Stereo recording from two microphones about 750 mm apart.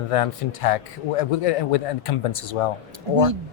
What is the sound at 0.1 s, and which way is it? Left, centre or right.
A man's voice, left.